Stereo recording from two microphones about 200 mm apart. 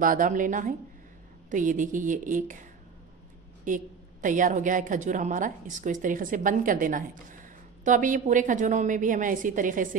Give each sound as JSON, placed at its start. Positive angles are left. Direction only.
{"t": 0.0, "sound": "a woman's voice", "side_deg": -40}
{"t": 3.6, "sound": "a woman's voice", "side_deg": -40}